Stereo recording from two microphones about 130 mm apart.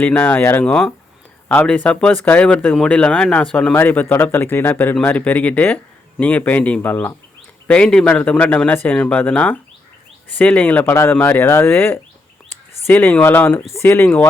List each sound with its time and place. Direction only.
0.0 s a man's voice: 15° left (ahead or behind)